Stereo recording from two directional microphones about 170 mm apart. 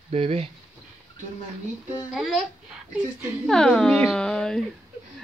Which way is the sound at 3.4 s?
5° left (ahead or behind).